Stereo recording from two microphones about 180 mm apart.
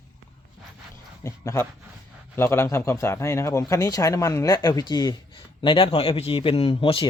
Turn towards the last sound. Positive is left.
turn(degrees=30)  # may be behind; listen again after turning